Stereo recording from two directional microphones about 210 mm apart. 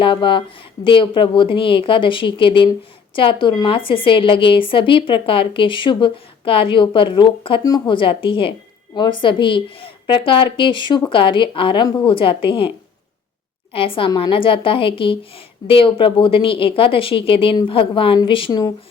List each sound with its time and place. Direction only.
0.0 s a woman's voice: 25° left (ahead or behind)
13.7 s a woman's voice: 25° left (ahead or behind)